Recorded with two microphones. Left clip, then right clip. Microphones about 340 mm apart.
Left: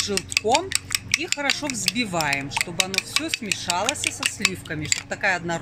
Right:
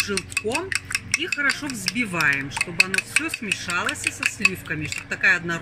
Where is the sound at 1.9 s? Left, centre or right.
Centre.